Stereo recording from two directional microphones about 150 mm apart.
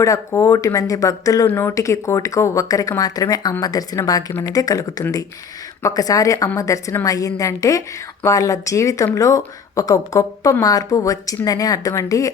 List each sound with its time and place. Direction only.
0.0 s a woman's voice: 20° left (ahead or behind)